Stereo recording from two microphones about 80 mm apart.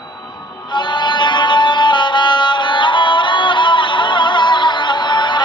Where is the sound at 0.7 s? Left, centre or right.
Left.